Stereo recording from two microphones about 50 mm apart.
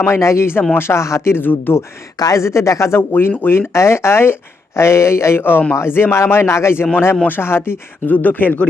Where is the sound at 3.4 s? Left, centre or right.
Left.